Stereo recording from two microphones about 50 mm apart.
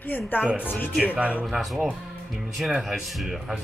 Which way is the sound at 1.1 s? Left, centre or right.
Right.